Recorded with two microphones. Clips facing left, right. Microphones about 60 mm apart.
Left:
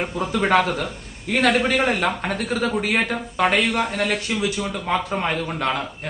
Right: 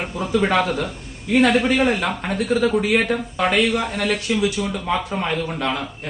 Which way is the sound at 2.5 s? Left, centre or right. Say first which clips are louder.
Right 5 dB; left.